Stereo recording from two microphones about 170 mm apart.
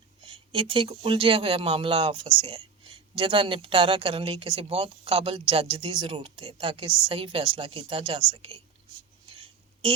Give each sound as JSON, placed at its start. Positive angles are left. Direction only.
{"t": 0.3, "sound": "speech", "side_deg": -30}